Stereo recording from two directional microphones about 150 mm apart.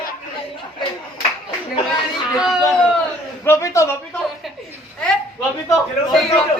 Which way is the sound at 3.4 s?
20° left (ahead or behind).